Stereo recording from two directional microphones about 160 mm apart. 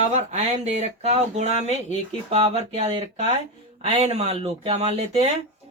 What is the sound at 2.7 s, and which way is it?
Speech, 40° right (ahead or behind).